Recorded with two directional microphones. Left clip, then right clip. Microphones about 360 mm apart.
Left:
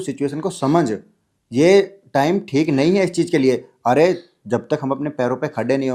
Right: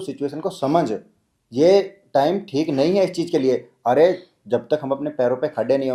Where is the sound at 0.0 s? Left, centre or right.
Left.